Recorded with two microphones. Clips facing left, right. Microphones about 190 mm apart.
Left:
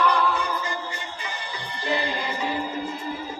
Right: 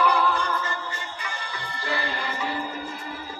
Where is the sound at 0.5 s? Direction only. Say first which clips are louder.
Even; 15° left (ahead or behind).